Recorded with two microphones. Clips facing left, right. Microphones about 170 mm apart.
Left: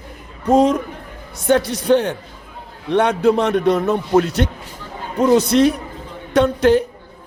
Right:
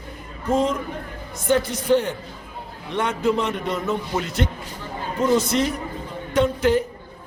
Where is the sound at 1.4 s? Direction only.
75° left (ahead or behind).